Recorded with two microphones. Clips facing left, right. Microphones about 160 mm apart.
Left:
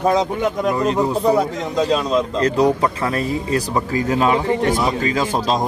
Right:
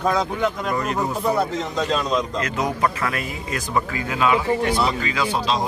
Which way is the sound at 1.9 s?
5° left (ahead or behind).